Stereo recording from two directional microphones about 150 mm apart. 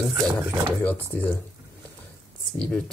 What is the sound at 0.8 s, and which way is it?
Speech, 10° left (ahead or behind).